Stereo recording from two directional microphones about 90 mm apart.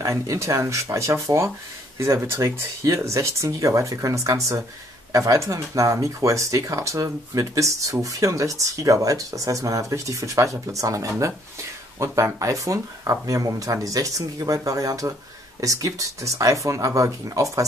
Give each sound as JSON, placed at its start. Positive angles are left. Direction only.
{"t": 0.0, "sound": "speech", "side_deg": -35}